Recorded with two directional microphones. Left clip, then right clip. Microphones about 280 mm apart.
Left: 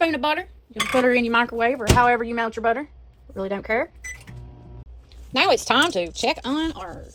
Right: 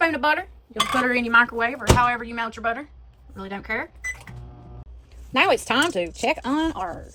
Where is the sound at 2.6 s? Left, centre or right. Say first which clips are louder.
Left 4 dB; left.